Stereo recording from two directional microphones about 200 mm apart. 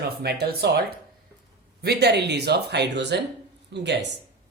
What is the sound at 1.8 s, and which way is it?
Speech, 55° right (ahead or behind).